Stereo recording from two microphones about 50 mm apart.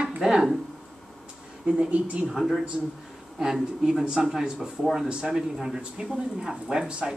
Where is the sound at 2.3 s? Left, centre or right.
Centre.